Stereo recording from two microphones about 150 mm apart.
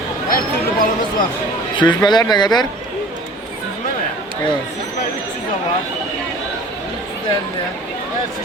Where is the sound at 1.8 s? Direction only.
30° left (ahead or behind).